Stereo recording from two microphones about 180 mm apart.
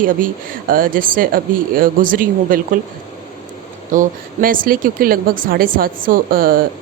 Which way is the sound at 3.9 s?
50° right (ahead or behind).